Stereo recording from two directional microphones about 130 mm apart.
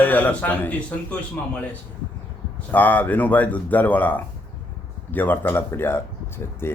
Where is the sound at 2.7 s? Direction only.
15° left (ahead or behind).